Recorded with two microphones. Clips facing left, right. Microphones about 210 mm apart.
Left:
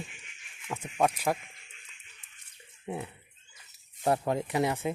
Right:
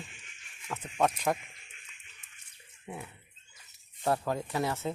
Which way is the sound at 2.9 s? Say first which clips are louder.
Left 6 dB; 30° left (ahead or behind).